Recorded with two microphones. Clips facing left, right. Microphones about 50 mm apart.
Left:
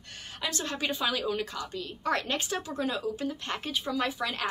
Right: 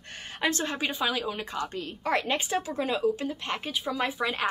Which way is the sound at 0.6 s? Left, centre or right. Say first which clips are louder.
Right 2 dB; centre.